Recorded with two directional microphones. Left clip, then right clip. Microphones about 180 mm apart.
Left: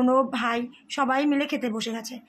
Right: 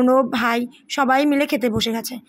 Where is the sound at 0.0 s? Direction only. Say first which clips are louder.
Right 5 dB; 25° right (ahead or behind).